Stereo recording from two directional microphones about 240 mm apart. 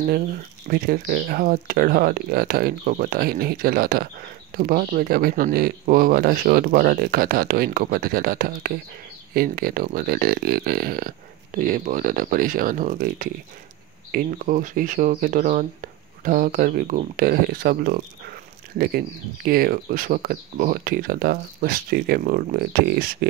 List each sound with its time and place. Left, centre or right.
0.7 s speech: right